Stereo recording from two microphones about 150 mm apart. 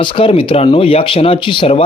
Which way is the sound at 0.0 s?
35° left (ahead or behind).